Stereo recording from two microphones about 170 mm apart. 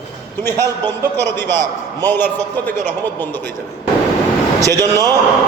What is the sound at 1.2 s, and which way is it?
Speech, 90° right.